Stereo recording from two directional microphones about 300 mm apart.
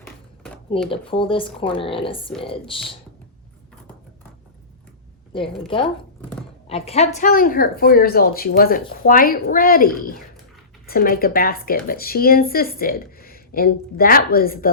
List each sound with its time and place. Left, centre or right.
0.0 s a sound: centre
0.9 s speech: centre
5.6 s speech: centre